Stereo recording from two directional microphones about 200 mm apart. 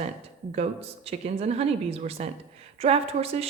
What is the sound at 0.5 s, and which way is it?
A woman's voice, 30° right (ahead or behind).